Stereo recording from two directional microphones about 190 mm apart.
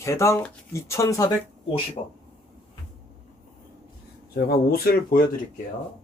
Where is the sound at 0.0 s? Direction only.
15° left (ahead or behind).